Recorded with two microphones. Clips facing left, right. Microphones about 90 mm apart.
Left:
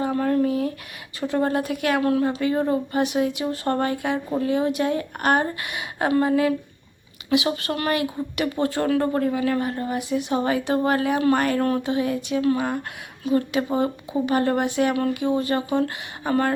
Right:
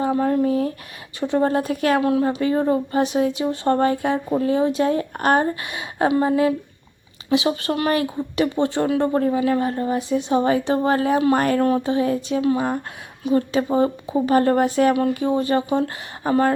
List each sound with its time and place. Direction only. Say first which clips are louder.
0.0 s a woman's voice: right 2 dB; 25° right (ahead or behind)
7.5 s a woman's voice: right 3 dB; 30° right (ahead or behind)